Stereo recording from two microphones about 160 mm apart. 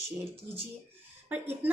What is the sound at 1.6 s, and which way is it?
Speech, 10° right (ahead or behind).